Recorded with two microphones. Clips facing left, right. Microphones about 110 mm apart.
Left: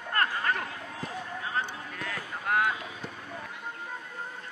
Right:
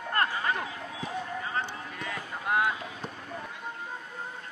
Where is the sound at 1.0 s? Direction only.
Centre (ahead or behind).